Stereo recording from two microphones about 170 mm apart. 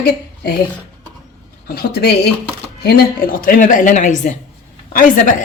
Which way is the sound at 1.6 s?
65° left (ahead or behind).